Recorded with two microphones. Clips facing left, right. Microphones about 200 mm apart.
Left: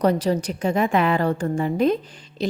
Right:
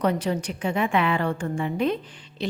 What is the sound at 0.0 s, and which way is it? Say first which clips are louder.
A woman's voice: left 4 dB; 40° left (ahead or behind).